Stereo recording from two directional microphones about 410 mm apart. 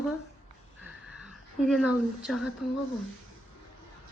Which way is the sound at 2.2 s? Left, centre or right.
Centre.